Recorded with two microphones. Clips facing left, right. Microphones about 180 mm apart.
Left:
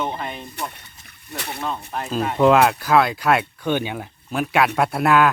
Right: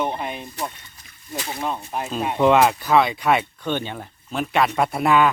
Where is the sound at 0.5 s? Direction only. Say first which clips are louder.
Right 1 dB; 65° left (ahead or behind).